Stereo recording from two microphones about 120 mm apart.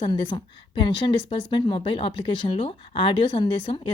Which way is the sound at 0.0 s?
45° left (ahead or behind).